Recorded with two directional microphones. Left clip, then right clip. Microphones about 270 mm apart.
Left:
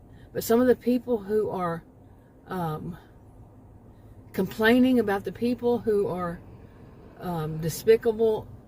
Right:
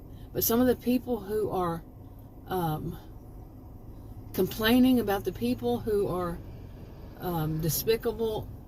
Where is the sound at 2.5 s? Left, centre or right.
Left.